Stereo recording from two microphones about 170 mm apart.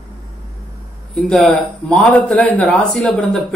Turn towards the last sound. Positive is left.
turn(degrees=0)  # may be behind; listen again after turning